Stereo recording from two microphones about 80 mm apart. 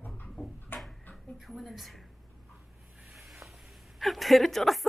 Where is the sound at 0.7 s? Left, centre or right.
Left.